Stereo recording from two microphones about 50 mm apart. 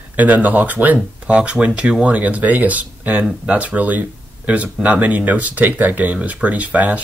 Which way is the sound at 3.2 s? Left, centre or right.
Centre.